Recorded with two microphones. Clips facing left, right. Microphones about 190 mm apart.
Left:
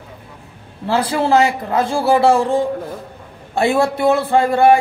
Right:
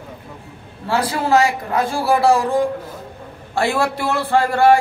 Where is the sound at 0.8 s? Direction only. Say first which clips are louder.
Left 3 dB; 25° left (ahead or behind).